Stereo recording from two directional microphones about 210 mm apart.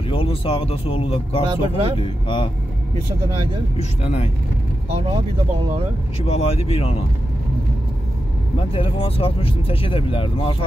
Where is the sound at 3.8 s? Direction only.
30° left (ahead or behind).